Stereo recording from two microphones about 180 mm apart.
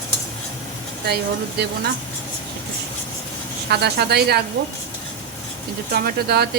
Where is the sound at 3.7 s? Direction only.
65° right (ahead or behind).